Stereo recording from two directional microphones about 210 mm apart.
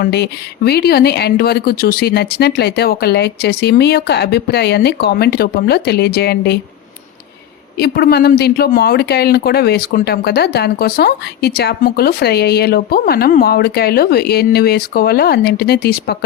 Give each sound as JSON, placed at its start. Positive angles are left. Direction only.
{"t": 0.0, "sound": "speech", "side_deg": 50}
{"t": 7.8, "sound": "speech", "side_deg": 45}